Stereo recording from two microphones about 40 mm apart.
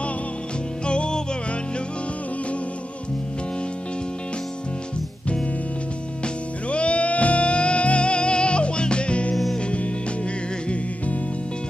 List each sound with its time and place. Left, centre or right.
0.8 s music: left
6.2 s music: left